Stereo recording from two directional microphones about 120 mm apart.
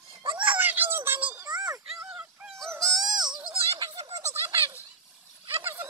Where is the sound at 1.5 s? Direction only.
35° right (ahead or behind).